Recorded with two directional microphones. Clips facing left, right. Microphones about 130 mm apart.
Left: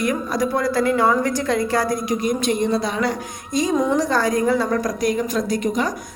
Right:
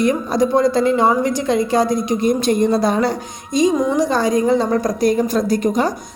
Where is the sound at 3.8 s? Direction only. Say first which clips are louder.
Right 2 dB; 10° right (ahead or behind); by 5.9 s 35° right (ahead or behind).